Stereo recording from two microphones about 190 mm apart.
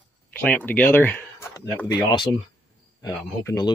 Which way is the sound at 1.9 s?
25° left (ahead or behind).